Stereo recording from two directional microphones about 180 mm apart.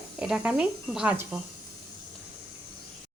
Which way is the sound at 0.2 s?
5° right (ahead or behind).